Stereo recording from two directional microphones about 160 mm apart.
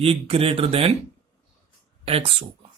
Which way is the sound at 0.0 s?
35° right (ahead or behind).